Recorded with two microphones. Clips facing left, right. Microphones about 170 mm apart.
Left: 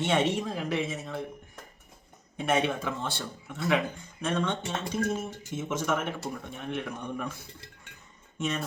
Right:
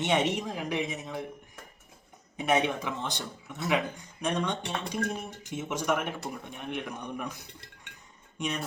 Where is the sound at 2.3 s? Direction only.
15° right (ahead or behind).